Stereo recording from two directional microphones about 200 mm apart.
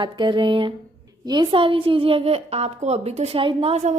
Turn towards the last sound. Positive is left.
turn(degrees=-30)  # may be behind; listen again after turning